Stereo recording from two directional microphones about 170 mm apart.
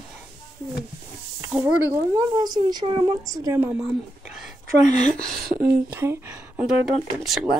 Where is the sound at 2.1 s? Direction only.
25° right (ahead or behind).